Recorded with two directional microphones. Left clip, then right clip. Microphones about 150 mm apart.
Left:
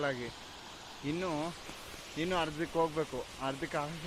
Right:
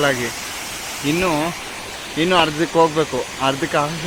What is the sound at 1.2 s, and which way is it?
Speech, 5° left (ahead or behind).